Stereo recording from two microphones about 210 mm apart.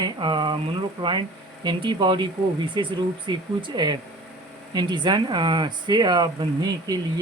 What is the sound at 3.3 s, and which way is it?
Speech, 20° right (ahead or behind).